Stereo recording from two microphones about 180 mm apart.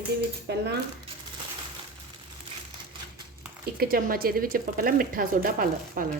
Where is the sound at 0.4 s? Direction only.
65° right (ahead or behind).